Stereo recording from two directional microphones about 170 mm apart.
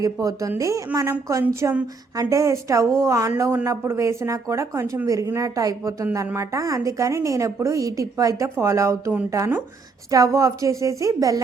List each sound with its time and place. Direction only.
0.0 s a woman's voice: 20° right (ahead or behind)